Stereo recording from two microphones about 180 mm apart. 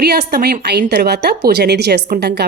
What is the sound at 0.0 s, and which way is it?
A woman's voice, 60° right (ahead or behind).